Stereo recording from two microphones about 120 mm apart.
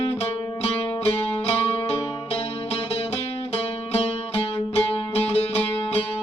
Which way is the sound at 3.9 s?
60° left (ahead or behind).